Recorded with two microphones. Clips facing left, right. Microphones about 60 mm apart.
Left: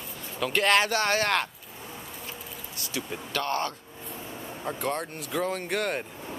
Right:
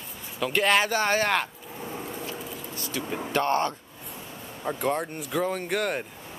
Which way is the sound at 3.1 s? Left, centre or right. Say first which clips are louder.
Right 6 dB; right.